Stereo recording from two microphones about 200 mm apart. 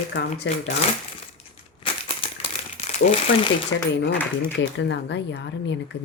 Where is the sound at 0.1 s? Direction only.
70° left (ahead or behind).